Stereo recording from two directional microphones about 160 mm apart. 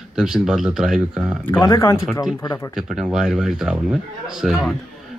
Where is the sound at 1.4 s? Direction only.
15° left (ahead or behind).